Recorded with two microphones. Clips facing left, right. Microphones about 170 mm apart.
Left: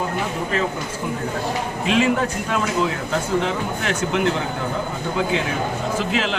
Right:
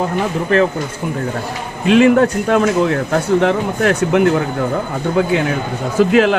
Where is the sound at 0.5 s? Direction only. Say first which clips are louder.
Right 11 dB; 65° right (ahead or behind).